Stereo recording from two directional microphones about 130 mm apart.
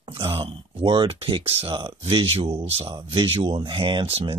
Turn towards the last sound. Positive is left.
turn(degrees=-45)  # may be behind; listen again after turning